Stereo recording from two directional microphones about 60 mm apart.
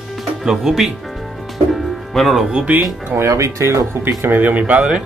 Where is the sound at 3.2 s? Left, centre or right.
Right.